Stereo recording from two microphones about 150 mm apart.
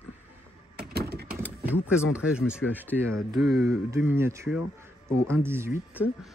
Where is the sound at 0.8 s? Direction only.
90° right.